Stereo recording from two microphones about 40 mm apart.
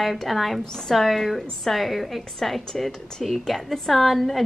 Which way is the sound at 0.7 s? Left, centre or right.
Centre.